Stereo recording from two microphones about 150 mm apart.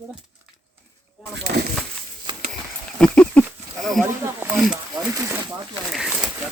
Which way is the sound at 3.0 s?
5° left (ahead or behind).